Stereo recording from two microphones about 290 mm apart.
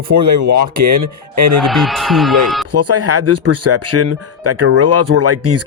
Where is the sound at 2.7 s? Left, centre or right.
Right.